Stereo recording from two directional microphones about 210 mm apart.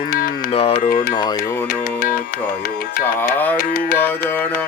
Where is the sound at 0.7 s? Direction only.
45° left (ahead or behind).